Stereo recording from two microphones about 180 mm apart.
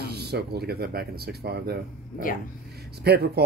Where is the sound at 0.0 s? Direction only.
65° right (ahead or behind).